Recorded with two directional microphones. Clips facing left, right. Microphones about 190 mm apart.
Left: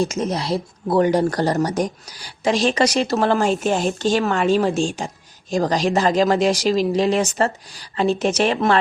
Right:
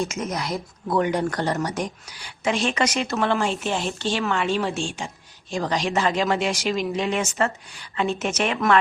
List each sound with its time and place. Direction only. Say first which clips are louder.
0.0 s speech: left 5 dB; 35° left (ahead or behind)